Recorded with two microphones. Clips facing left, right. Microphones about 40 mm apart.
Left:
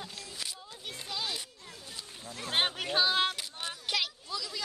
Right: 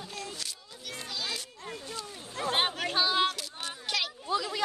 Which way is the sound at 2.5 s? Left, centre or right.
Centre.